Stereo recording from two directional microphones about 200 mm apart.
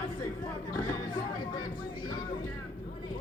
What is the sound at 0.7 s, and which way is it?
Speech, 20° left (ahead or behind).